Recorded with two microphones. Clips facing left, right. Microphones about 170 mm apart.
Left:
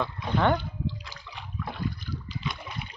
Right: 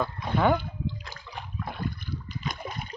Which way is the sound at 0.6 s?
50° right (ahead or behind).